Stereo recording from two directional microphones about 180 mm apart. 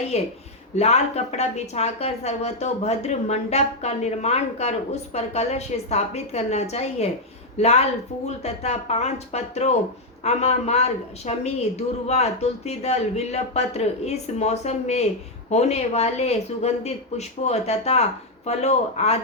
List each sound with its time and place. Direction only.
0.1 s a woman's voice: 35° left (ahead or behind)